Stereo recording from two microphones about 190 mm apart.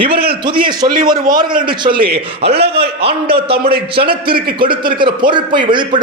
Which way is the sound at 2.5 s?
60° right (ahead or behind).